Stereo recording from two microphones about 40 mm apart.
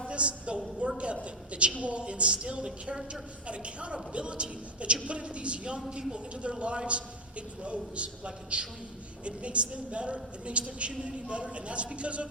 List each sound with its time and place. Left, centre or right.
0.1 s a woman's voice: right
2.6 s a woman's voice: centre
3.1 s a man's voice: right